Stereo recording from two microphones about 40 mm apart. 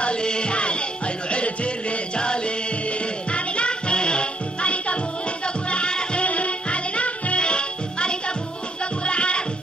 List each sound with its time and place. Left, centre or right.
0.0 s music: left